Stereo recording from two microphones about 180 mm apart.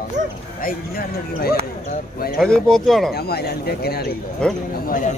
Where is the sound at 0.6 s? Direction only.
55° left (ahead or behind).